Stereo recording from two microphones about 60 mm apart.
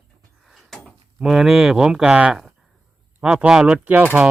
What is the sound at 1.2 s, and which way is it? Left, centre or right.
Speech, centre.